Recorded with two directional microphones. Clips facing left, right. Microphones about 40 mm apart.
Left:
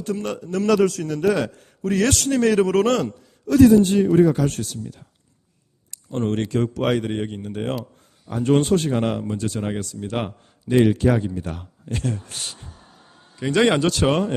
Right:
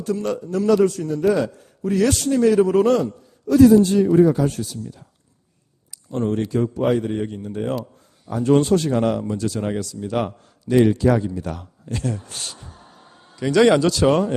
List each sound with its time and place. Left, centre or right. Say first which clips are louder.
0.0 s a man's voice: right 3 dB; left
0.9 s a man's voice: right 1 dB; left
6.1 s a man's voice: right 1 dB; left
10.0 s a man's voice: right 3 dB; left
11.1 s speech: right 2 dB; left
11.3 s speech: right 1 dB; left
11.9 s speech: even; left
12.3 s speech: even; left
13.5 s speech: right 3 dB; left